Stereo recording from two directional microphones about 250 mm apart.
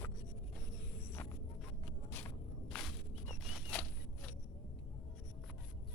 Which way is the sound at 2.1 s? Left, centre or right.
Centre.